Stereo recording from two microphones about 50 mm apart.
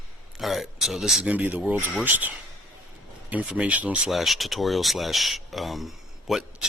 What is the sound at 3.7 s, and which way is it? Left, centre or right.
Speech, right.